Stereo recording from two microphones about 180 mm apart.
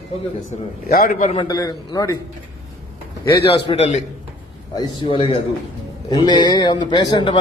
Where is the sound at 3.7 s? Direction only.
40° left (ahead or behind).